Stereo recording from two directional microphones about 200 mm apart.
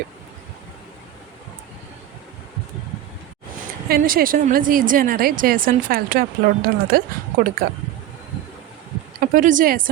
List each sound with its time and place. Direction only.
3.8 s a woman's voice: 50° right (ahead or behind)
9.3 s a woman's voice: 40° right (ahead or behind)